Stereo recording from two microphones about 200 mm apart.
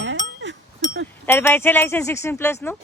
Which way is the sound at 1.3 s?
10° left (ahead or behind).